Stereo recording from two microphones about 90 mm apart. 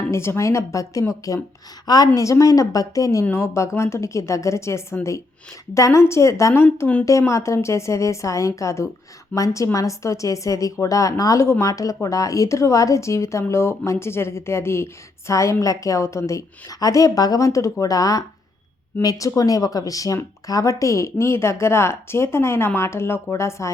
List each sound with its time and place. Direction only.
0.1 s speech: 30° left (ahead or behind)
19.4 s speech: 40° left (ahead or behind)